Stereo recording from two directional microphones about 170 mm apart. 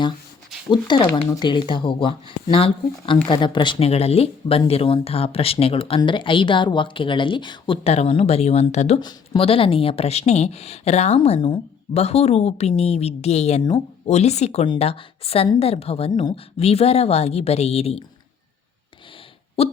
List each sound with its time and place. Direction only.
0.7 s speech: 30° left (ahead or behind)
9.0 s speech: 25° left (ahead or behind)
14.1 s speech: 40° left (ahead or behind)
19.6 s speech: 35° left (ahead or behind)